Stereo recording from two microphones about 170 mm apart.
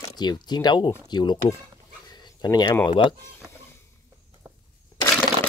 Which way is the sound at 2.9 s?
30° left (ahead or behind).